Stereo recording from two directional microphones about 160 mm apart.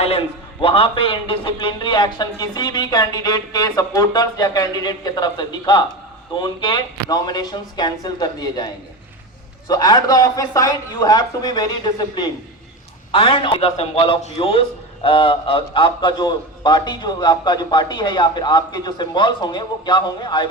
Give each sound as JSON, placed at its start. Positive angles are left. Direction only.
{"t": 0.6, "sound": "a man's voice", "side_deg": 35}